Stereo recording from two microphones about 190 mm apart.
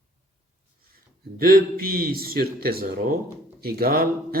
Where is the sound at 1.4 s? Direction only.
50° right (ahead or behind).